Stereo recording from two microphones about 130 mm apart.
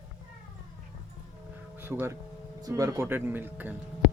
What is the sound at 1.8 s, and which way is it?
Speech, 20° right (ahead or behind).